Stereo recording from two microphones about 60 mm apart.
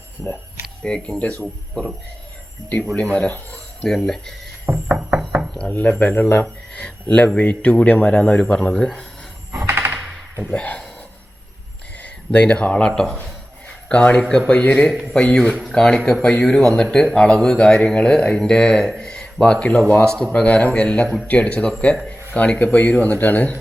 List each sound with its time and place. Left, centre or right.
0.8 s speech: centre
2.9 s speech: centre
3.8 s speech: centre
4.9 s knock: right
5.5 s speech: left
9.6 s a sound: right
10.5 s speech: centre
12.0 s speech: left